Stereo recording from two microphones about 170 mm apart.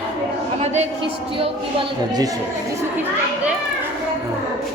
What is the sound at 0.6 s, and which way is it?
Speech, 40° right (ahead or behind).